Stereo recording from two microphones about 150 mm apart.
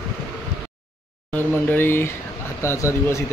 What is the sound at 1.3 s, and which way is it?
Speech, 15° left (ahead or behind).